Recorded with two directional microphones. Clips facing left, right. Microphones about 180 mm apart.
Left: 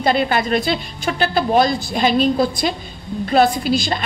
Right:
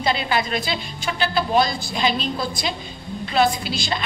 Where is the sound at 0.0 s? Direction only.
50° left (ahead or behind).